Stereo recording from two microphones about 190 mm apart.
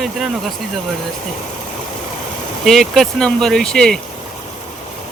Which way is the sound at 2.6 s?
Centre (ahead or behind).